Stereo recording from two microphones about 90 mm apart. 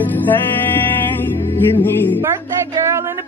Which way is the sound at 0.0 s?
20° left (ahead or behind).